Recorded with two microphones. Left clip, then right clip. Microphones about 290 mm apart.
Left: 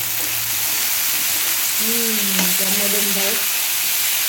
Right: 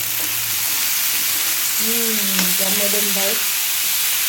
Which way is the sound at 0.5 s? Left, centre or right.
Centre.